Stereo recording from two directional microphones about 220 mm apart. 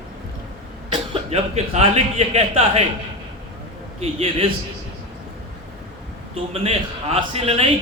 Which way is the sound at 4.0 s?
30° right (ahead or behind).